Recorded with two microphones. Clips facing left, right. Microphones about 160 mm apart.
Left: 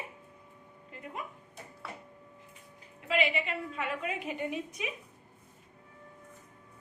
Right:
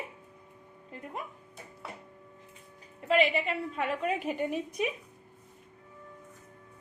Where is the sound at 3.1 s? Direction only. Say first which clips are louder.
Right 4 dB; 40° right (ahead or behind).